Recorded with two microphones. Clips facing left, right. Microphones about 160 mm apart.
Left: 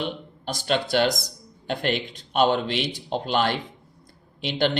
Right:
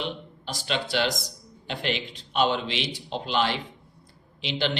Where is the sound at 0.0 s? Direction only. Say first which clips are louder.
Left 3 dB; 50° left (ahead or behind).